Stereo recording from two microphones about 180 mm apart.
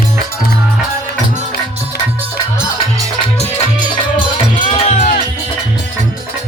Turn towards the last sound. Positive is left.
turn(degrees=35)  # may be behind; listen again after turning